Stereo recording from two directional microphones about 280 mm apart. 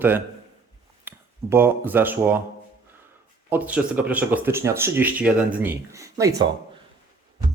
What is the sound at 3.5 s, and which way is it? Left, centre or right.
Speech, centre.